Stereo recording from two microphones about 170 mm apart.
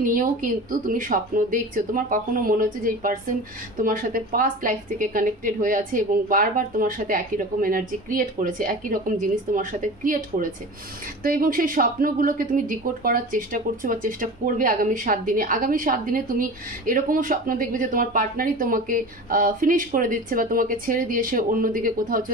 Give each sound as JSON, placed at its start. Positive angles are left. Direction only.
{"t": 0.0, "sound": "a woman's voice", "side_deg": -55}